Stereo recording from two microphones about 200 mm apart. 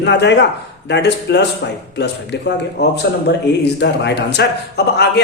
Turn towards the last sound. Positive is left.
turn(degrees=55)  # may be behind; listen again after turning